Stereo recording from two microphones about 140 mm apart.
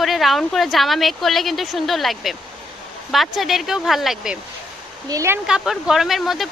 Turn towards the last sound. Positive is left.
turn(degrees=0)  # may be behind; listen again after turning